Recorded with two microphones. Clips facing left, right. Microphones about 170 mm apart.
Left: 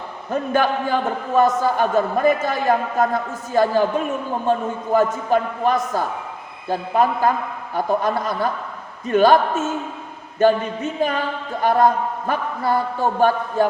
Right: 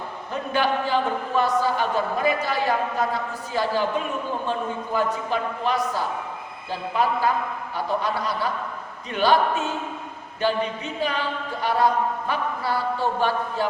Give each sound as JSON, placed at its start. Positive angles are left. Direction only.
{"t": 0.3, "sound": "a man's voice", "side_deg": 45}
{"t": 11.6, "sound": "a man's voice", "side_deg": 50}